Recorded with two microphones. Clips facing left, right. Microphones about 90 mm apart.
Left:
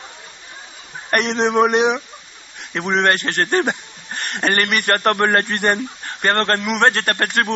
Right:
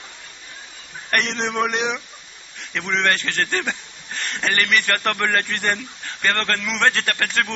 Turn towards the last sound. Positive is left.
turn(degrees=25)  # may be behind; listen again after turning